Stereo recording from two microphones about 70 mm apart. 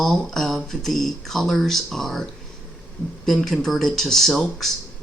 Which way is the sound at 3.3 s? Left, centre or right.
Centre.